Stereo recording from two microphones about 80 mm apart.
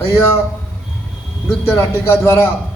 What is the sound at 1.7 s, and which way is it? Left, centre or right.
Speech, left.